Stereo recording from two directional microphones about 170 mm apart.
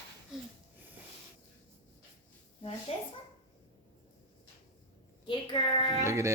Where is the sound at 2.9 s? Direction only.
35° left (ahead or behind).